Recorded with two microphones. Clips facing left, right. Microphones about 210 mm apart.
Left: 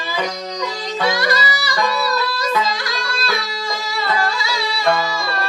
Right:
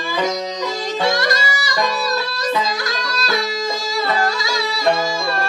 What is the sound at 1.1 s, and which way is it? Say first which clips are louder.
Music: even; 45° right (ahead or behind).